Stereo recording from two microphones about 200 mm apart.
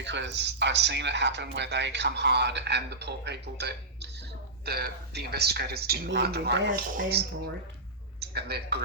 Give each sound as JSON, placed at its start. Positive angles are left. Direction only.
{"t": 0.0, "sound": "a man's voice", "side_deg": -60}